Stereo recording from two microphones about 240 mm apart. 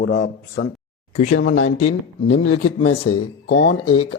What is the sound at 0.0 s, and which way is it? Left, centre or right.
Speech, left.